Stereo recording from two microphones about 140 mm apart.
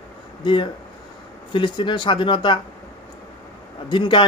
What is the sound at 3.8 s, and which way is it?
Speech, 35° left (ahead or behind).